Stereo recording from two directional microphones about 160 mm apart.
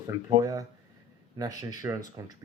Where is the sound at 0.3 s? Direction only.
25° right (ahead or behind).